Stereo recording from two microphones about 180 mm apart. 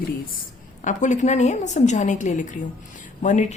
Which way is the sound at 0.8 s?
40° left (ahead or behind).